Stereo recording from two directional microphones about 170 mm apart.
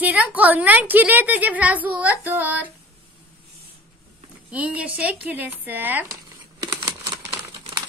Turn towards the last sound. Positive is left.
turn(degrees=-25)  # may be behind; listen again after turning